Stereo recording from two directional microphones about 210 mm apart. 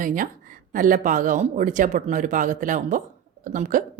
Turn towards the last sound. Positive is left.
turn(degrees=-35)  # may be behind; listen again after turning